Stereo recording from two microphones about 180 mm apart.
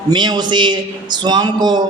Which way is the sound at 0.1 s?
25° right (ahead or behind).